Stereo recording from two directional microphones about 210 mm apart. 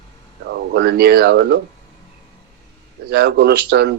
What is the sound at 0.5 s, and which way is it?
Speech, 50° right (ahead or behind).